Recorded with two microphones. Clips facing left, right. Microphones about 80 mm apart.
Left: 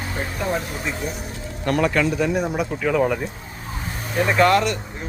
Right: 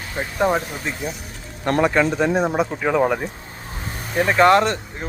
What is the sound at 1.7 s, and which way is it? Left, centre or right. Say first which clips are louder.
Speech: right 2 dB; right.